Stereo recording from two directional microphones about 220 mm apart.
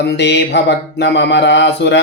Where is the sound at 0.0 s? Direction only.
50° left (ahead or behind).